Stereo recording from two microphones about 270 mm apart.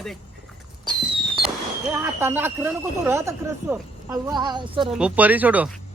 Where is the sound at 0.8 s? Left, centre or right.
Centre.